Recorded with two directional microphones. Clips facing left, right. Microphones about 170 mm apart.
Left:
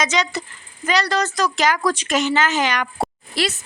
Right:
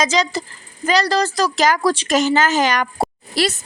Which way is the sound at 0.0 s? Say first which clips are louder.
Right 3 dB; 35° right (ahead or behind).